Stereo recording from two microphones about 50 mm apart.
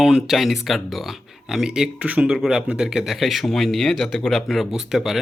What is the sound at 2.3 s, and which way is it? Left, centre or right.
A man's voice, centre.